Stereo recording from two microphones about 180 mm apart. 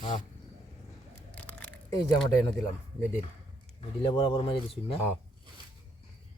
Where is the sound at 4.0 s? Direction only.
30° left (ahead or behind).